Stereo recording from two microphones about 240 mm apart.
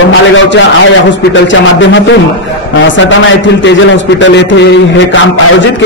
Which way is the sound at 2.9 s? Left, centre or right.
Left.